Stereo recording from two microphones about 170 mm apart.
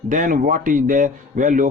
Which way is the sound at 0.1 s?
50° right (ahead or behind).